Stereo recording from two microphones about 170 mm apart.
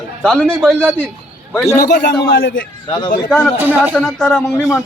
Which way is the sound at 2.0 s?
55° left (ahead or behind).